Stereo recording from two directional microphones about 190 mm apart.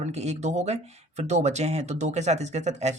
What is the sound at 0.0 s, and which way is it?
Speech, 35° right (ahead or behind).